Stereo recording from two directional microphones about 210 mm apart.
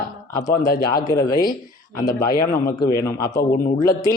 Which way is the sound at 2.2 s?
45° left (ahead or behind).